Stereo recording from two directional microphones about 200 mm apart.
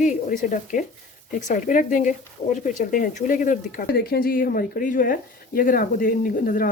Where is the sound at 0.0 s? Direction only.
40° left (ahead or behind).